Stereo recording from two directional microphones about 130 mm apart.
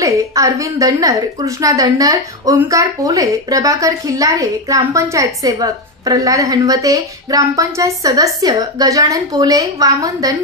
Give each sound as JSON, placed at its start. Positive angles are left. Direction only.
{"t": 0.0, "sound": "a woman's voice", "side_deg": -25}